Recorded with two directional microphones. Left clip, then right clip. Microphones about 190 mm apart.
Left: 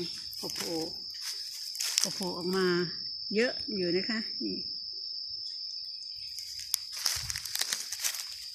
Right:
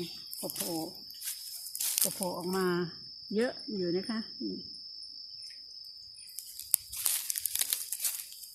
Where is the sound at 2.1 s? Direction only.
15° right (ahead or behind).